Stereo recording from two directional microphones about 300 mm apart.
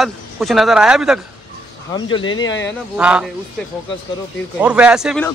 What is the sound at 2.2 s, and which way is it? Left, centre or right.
Speech, left.